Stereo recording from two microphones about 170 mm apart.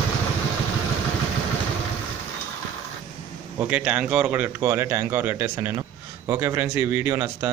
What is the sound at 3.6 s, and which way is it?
A man's voice, 10° right (ahead or behind).